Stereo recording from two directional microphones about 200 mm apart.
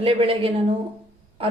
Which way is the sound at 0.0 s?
30° right (ahead or behind).